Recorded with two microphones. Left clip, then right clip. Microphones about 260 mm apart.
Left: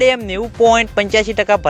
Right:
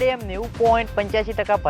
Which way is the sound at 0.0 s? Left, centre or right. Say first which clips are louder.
Left 8 dB; left.